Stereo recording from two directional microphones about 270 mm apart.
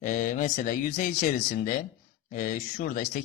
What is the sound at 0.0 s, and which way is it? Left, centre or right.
Speech, left.